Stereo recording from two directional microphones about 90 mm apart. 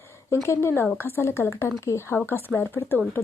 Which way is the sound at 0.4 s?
30° left (ahead or behind).